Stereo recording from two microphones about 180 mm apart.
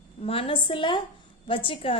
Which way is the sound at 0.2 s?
30° left (ahead or behind).